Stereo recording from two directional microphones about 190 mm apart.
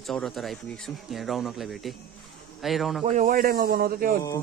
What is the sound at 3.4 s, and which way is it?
Speech, 50° right (ahead or behind).